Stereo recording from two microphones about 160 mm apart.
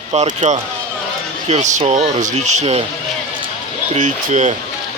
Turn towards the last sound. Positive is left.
turn(degrees=-50)  # may be behind; listen again after turning